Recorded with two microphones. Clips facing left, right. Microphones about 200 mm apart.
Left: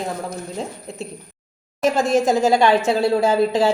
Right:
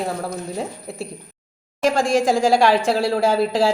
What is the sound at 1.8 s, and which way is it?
A woman's voice, 5° left (ahead or behind).